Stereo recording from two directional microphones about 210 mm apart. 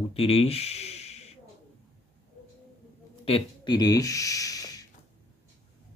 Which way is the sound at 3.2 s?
25° left (ahead or behind).